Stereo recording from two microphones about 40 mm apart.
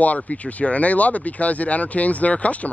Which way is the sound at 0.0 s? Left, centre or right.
Left.